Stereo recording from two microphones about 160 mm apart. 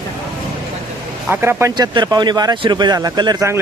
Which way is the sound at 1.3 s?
15° right (ahead or behind).